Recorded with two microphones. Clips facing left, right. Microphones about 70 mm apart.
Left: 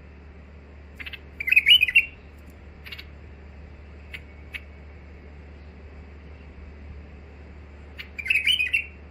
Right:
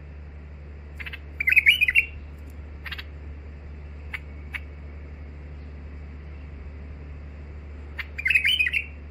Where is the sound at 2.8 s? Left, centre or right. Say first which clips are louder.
Right 6 dB; right.